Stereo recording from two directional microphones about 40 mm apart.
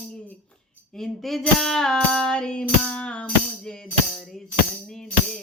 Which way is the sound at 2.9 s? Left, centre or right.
Left.